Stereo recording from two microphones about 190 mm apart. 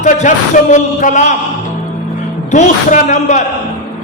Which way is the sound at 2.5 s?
40° left (ahead or behind).